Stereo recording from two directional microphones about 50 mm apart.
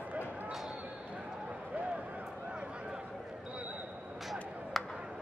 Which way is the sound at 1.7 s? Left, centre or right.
Right.